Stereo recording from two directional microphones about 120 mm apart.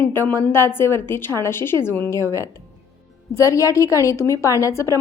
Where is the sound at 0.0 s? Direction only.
20° left (ahead or behind).